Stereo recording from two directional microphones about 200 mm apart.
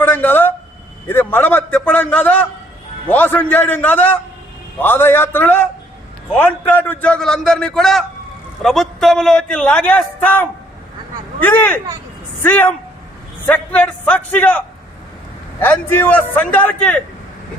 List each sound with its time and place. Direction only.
0.0 s a man's voice: 10° left (ahead or behind)
15.6 s a man's voice: 10° left (ahead or behind)